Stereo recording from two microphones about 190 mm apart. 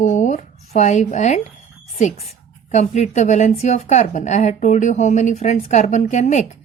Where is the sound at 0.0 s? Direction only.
40° left (ahead or behind).